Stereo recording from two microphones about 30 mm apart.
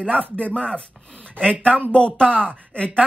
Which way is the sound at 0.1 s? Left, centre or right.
Left.